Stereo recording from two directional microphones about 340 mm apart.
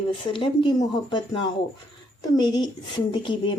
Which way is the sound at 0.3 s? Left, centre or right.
Centre.